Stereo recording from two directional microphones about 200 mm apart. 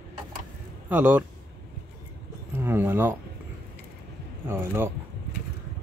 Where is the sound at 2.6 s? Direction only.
10° right (ahead or behind).